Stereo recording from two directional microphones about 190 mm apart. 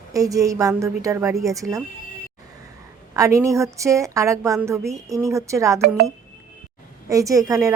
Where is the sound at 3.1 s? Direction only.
15° right (ahead or behind).